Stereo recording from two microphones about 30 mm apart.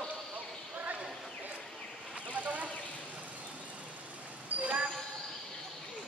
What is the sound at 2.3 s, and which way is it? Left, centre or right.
Vehicle, right.